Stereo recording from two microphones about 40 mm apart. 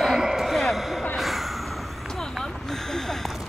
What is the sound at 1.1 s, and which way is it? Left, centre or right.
Sigh, centre.